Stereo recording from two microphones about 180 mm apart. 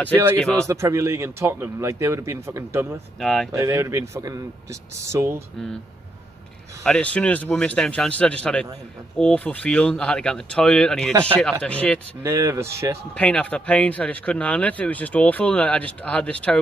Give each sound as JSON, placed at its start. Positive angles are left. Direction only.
{"t": 0.1, "sound": "a man's voice", "side_deg": -10}
{"t": 0.4, "sound": "speech", "side_deg": 5}
{"t": 0.7, "sound": "a man's voice", "side_deg": -15}
{"t": 3.2, "sound": "speech", "side_deg": 0}
{"t": 3.5, "sound": "a man's voice", "side_deg": -15}
{"t": 6.8, "sound": "speech", "side_deg": 5}
{"t": 12.2, "sound": "a man's voice", "side_deg": -15}
{"t": 13.1, "sound": "speech", "side_deg": 5}